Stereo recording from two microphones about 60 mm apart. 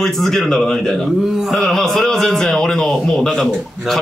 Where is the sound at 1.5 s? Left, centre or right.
Centre.